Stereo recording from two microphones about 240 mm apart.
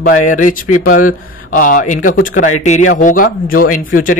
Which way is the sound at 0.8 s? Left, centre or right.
Left.